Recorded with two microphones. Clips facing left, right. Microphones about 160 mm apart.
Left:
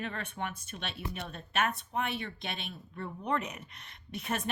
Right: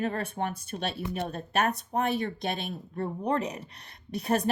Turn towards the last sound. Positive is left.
turn(degrees=-35)  # may be behind; listen again after turning